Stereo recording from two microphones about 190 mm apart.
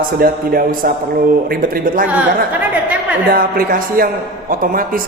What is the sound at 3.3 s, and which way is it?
Speech, 50° right (ahead or behind).